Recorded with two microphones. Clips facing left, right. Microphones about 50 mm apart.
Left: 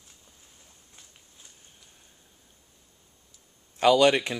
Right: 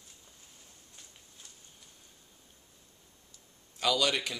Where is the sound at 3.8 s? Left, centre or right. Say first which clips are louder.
Left 10 dB; left.